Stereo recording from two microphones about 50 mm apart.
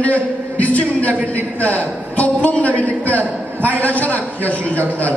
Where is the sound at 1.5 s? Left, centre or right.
Left.